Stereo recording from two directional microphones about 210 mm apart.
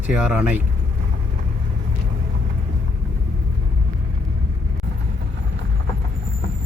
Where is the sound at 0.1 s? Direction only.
5° right (ahead or behind).